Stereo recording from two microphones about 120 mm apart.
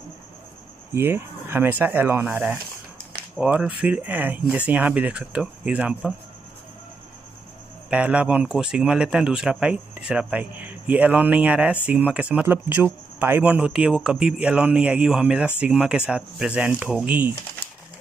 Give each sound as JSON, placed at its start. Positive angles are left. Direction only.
{"t": 0.9, "sound": "speech", "side_deg": -20}
{"t": 7.9, "sound": "speech", "side_deg": -10}